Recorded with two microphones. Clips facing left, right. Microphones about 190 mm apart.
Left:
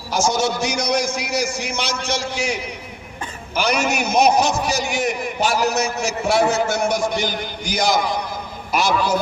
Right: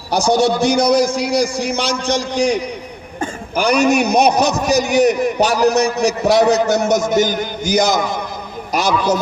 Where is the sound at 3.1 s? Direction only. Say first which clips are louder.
Right 5 dB; 35° right (ahead or behind).